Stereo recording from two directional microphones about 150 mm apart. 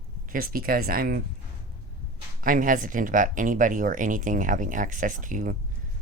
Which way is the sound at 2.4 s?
65° right (ahead or behind).